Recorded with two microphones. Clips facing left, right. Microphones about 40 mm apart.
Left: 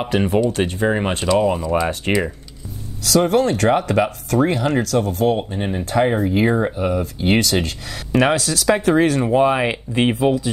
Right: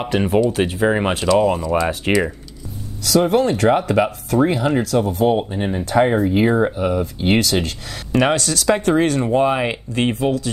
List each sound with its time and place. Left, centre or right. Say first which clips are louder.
0.0 s speech: right 1 dB; centre
1.2 s speech: right 1 dB; centre
5.5 s speech: right 2 dB; centre